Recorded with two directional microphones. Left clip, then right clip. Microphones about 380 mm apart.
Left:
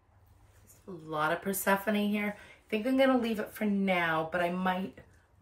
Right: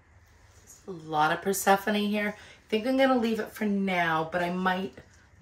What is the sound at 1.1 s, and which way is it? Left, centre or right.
Speech, centre.